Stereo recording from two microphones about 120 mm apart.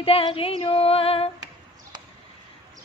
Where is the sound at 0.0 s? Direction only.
50° left (ahead or behind).